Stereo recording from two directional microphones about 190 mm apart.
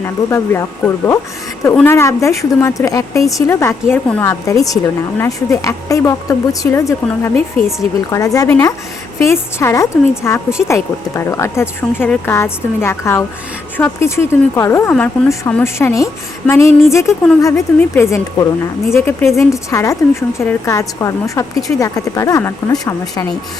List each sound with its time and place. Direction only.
0.0 s a woman's voice: 15° left (ahead or behind)